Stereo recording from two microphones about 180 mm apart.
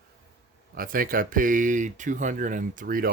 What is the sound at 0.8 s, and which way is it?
Speech, 50° right (ahead or behind).